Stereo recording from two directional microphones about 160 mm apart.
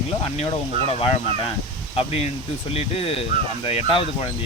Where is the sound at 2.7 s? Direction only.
35° left (ahead or behind).